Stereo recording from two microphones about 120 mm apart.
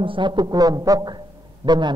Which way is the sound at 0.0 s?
45° right (ahead or behind).